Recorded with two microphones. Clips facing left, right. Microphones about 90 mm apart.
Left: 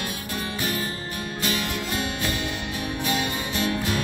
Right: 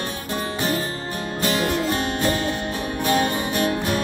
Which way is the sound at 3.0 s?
35° right (ahead or behind).